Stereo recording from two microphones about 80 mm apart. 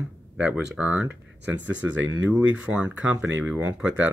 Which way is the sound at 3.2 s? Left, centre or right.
Right.